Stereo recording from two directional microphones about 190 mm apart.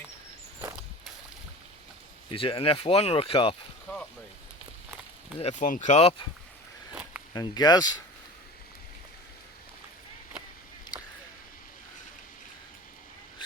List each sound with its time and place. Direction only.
2.3 s speech: 30° left (ahead or behind)
5.4 s speech: 40° left (ahead or behind)
7.3 s speech: 20° left (ahead or behind)